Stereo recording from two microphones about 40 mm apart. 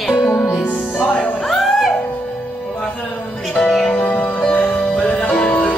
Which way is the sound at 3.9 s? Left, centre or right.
Left.